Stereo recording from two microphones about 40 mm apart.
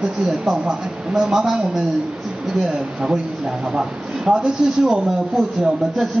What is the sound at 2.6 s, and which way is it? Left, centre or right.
Speech, right.